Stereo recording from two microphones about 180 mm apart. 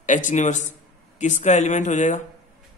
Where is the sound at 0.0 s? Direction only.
45° left (ahead or behind).